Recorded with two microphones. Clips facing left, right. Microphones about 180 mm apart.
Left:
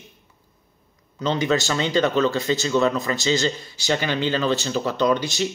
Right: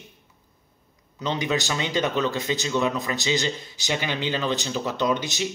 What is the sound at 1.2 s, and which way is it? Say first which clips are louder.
Speech: left 4 dB; 15° right (ahead or behind).